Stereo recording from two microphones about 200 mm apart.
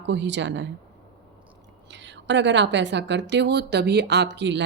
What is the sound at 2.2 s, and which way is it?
Speech, 60° right (ahead or behind).